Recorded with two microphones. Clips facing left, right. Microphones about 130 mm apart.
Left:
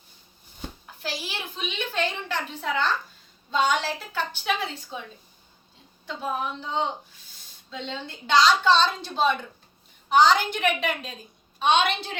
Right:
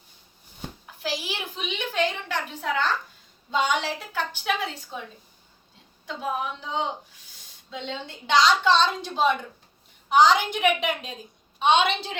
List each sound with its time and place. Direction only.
1.0 s a woman's voice: 15° right (ahead or behind)
6.1 s a woman's voice: 10° right (ahead or behind)